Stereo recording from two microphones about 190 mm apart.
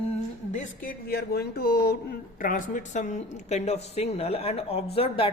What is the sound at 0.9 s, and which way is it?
Speech, 55° left (ahead or behind).